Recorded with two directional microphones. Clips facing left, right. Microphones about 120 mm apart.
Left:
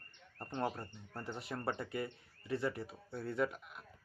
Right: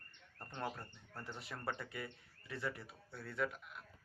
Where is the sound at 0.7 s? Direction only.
20° left (ahead or behind).